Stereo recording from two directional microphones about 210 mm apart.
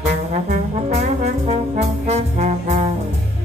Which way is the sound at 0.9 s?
30° right (ahead or behind).